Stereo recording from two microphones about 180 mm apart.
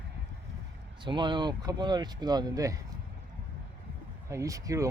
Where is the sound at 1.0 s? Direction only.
25° right (ahead or behind).